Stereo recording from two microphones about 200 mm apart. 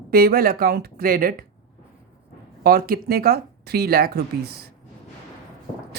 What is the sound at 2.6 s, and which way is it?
Speech, 50° right (ahead or behind).